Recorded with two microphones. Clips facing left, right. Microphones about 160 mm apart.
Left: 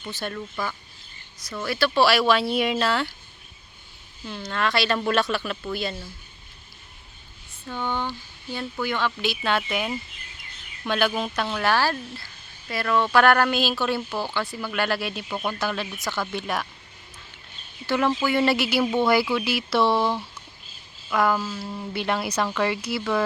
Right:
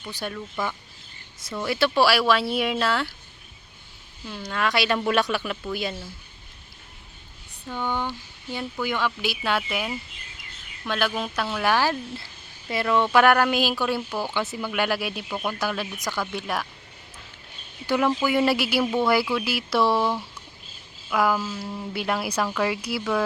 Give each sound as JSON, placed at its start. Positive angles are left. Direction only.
{"t": 0.1, "sound": "speech", "side_deg": -15}
{"t": 1.5, "sound": "speech", "side_deg": -20}
{"t": 2.0, "sound": "speech", "side_deg": -5}
{"t": 4.3, "sound": "speech", "side_deg": -5}
{"t": 7.7, "sound": "speech", "side_deg": -10}
{"t": 17.8, "sound": "speech", "side_deg": -5}